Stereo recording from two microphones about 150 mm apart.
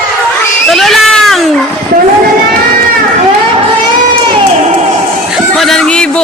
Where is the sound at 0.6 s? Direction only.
Centre (ahead or behind).